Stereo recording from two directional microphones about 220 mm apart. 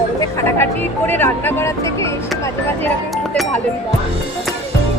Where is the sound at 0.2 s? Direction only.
10° left (ahead or behind).